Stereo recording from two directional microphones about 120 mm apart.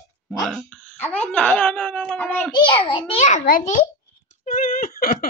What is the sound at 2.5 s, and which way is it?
Speech, 45° left (ahead or behind).